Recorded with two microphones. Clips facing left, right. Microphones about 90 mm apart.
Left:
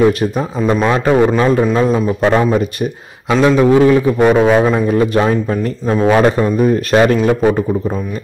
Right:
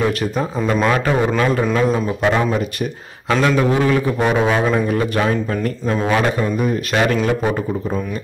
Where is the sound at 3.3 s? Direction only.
15° left (ahead or behind); by 7.6 s 35° left (ahead or behind).